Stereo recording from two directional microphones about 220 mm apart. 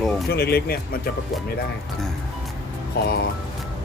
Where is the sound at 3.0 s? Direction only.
45° left (ahead or behind).